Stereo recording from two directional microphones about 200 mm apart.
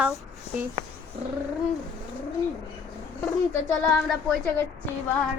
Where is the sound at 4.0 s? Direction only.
5° left (ahead or behind).